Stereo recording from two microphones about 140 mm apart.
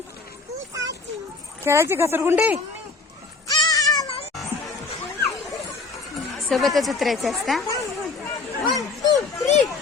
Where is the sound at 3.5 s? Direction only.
30° left (ahead or behind).